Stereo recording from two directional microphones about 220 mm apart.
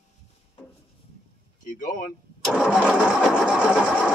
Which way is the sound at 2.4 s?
5° right (ahead or behind).